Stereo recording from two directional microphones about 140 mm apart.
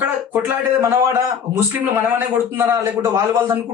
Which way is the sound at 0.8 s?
20° right (ahead or behind).